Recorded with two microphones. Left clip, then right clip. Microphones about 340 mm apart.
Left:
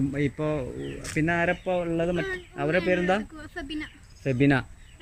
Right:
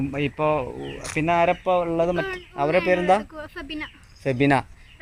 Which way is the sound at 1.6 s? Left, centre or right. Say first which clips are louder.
Right 6 dB; right.